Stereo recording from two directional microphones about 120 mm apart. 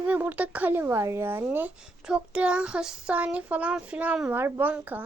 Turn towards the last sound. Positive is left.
turn(degrees=-15)  # may be behind; listen again after turning